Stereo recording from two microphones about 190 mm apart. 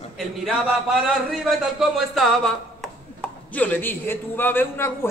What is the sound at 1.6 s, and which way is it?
Speech, centre (ahead or behind).